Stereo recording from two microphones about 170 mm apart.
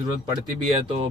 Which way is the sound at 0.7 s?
30° right (ahead or behind).